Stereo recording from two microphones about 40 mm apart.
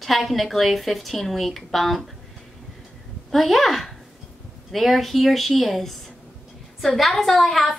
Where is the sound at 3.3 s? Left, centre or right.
Centre.